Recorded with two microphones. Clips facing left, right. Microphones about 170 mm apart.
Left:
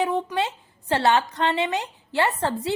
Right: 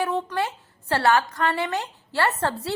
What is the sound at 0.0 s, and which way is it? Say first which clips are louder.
A woman's voice: left 1 dB; 15° left (ahead or behind).